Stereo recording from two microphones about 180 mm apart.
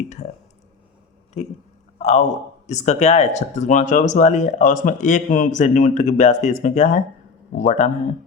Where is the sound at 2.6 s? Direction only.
40° left (ahead or behind).